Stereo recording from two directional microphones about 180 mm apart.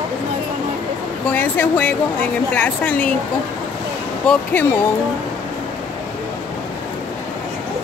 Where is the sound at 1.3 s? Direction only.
10° left (ahead or behind).